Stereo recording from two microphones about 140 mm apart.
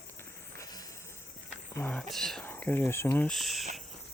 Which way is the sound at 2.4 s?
15° left (ahead or behind).